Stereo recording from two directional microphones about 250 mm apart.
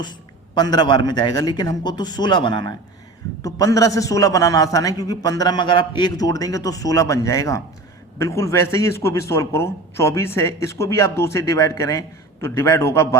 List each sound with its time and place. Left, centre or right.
0.0 s a man's voice: centre